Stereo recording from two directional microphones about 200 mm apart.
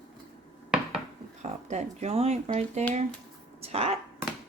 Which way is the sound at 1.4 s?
35° right (ahead or behind).